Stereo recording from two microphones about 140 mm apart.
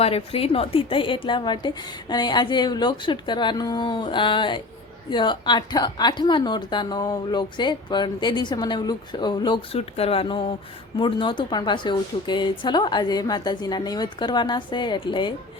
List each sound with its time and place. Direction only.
0.0 s a woman's voice: 45° left (ahead or behind)